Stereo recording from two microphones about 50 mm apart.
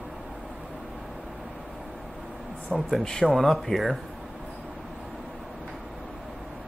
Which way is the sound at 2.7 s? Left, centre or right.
Centre.